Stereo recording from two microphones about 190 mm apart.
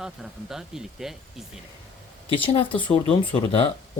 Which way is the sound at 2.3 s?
30° left (ahead or behind).